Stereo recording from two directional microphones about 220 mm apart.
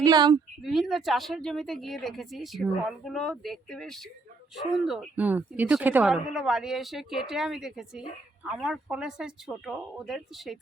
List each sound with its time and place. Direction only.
0.0 s speech: 20° right (ahead or behind)
0.6 s speech: centre (ahead or behind)